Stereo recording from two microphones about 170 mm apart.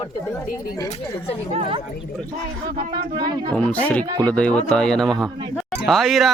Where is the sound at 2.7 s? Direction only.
25° right (ahead or behind).